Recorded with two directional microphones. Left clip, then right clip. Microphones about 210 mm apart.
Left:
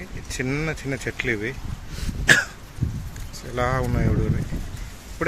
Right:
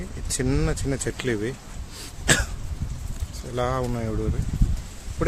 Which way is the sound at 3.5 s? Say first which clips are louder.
Left 2 dB; 5° right (ahead or behind).